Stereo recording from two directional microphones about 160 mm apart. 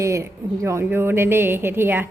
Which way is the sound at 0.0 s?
20° right (ahead or behind).